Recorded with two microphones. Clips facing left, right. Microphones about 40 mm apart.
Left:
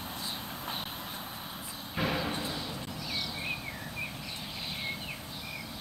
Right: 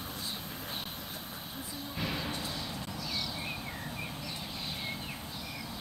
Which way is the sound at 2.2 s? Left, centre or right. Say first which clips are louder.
Left 3 dB; centre.